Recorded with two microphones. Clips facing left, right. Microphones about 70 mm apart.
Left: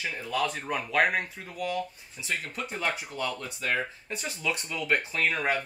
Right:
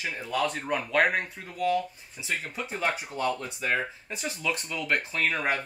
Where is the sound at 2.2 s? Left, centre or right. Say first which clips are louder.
Right 1 dB; centre.